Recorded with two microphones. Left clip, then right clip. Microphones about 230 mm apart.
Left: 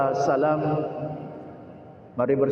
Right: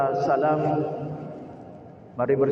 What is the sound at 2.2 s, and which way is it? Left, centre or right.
Speech, left.